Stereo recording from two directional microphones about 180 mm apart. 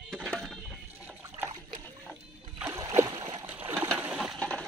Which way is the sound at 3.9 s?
5° right (ahead or behind).